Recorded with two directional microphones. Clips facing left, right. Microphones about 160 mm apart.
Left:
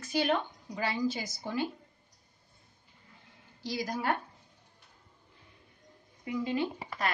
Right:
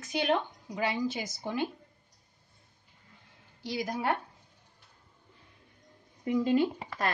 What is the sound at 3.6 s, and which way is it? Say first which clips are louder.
Speech: right 1 dB; 20° right (ahead or behind).